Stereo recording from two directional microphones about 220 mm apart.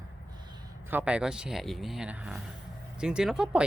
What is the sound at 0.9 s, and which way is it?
Speech, 5° right (ahead or behind).